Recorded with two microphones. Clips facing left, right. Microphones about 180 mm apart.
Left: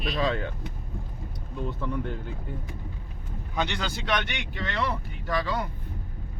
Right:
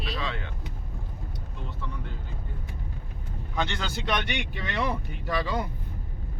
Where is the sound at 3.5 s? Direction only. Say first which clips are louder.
Left 1 dB; 5° left (ahead or behind).